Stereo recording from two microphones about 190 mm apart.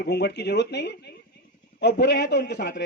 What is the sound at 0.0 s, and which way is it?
A man's voice, 60° left (ahead or behind).